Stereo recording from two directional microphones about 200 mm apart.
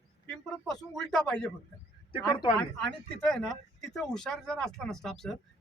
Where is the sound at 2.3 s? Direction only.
25° left (ahead or behind).